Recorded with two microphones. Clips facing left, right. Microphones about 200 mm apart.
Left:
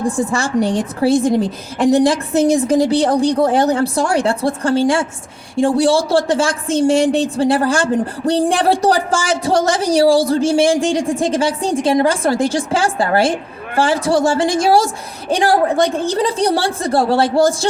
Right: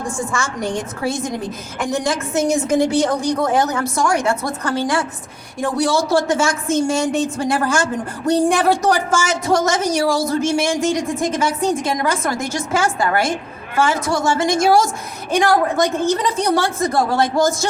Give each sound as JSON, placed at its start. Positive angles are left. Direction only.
{"t": 0.0, "sound": "speech", "side_deg": 35}